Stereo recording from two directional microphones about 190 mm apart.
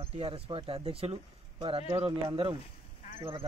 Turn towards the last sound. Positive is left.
turn(degrees=-30)  # may be behind; listen again after turning